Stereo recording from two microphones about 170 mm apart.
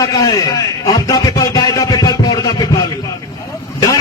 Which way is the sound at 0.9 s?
20° left (ahead or behind).